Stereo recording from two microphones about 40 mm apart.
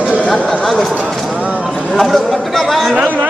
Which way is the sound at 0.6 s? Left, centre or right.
Centre.